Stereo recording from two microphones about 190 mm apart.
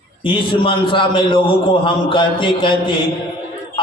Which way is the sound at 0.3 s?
25° left (ahead or behind).